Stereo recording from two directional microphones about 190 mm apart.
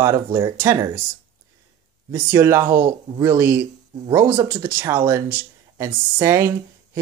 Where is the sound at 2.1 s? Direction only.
10° right (ahead or behind).